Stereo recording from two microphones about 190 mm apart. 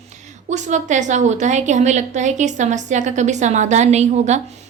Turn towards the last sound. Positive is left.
turn(degrees=-35)  # may be behind; listen again after turning